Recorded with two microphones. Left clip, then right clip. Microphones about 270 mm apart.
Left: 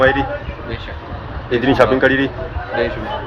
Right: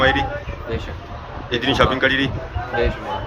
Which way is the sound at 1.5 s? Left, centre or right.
Centre.